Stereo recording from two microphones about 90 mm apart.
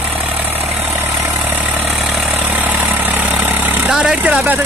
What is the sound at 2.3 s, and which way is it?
Vehicle, 20° right (ahead or behind).